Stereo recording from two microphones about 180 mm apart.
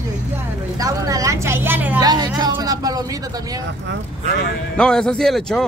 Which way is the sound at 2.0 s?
20° right (ahead or behind).